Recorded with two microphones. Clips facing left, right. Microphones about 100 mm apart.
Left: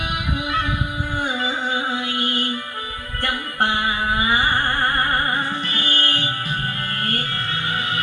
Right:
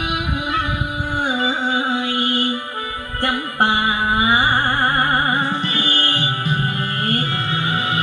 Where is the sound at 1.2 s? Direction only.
25° right (ahead or behind).